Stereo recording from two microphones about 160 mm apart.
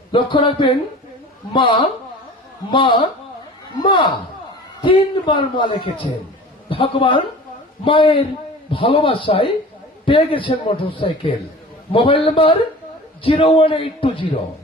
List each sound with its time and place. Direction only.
0.1 s a man's voice: 30° left (ahead or behind)